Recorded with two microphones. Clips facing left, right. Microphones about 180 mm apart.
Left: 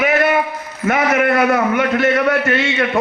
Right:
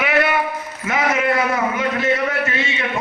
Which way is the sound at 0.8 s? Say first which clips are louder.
Left 4 dB; 60° left (ahead or behind).